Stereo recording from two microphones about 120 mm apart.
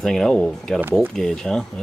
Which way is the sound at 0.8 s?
20° right (ahead or behind).